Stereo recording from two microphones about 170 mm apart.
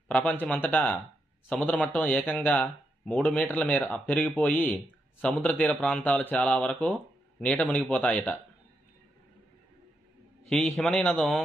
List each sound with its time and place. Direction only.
0.1 s speech: 10° left (ahead or behind)
10.5 s a man's voice: 5° left (ahead or behind)